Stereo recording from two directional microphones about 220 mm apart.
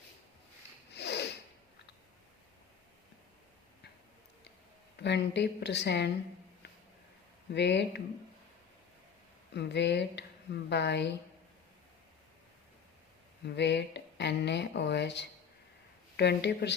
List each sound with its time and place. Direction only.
0.9 s a sound: 50° left (ahead or behind)
4.9 s speech: 50° left (ahead or behind)
7.5 s speech: 50° left (ahead or behind)
9.6 s speech: 50° left (ahead or behind)
13.4 s speech: 50° left (ahead or behind)